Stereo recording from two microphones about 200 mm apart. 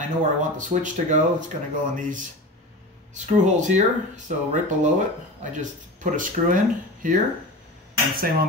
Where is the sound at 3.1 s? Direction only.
35° right (ahead or behind).